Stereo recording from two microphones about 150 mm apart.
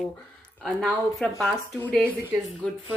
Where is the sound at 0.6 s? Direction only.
Centre (ahead or behind).